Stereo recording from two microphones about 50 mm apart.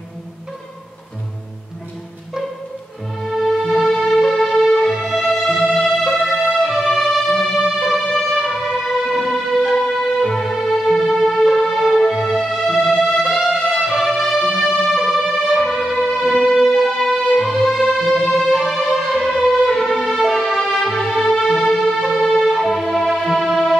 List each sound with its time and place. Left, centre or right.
3.3 s music: centre
9.8 s music: centre